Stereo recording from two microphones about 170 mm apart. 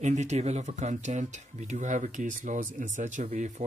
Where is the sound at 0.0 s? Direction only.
40° right (ahead or behind).